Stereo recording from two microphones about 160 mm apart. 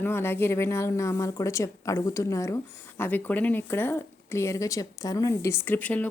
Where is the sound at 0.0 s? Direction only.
15° left (ahead or behind).